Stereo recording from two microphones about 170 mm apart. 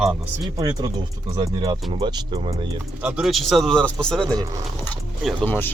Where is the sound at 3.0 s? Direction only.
5° right (ahead or behind).